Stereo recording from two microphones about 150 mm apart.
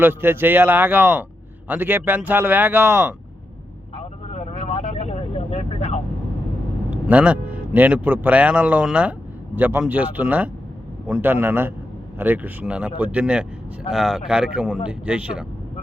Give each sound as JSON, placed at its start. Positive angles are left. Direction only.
{"t": 0.0, "sound": "speech", "side_deg": -15}
{"t": 3.9, "sound": "vehicle", "side_deg": 45}
{"t": 6.9, "sound": "a man's voice", "side_deg": -10}